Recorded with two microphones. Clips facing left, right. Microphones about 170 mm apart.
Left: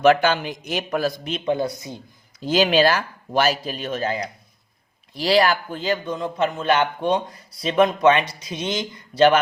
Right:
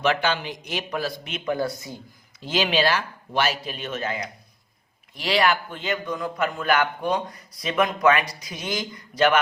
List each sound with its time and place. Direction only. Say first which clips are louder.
0.0 s a man's voice: left 7 dB; 45° left (ahead or behind)
1.3 s a man's voice: left 3 dB; 20° left (ahead or behind)
2.4 s a man's voice: left 5 dB; 40° left (ahead or behind)